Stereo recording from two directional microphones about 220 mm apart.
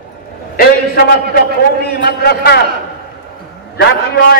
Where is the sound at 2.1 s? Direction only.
45° left (ahead or behind).